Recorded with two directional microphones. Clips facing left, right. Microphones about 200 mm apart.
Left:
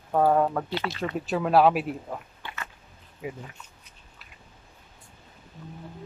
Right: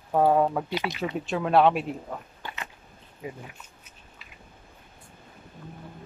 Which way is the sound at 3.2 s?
5° left (ahead or behind).